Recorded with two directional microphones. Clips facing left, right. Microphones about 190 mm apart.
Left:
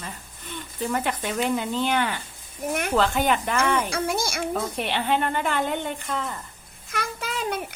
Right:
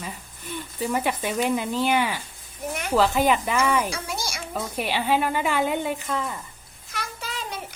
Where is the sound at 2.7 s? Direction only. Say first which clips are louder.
Left 3 dB; 55° left (ahead or behind).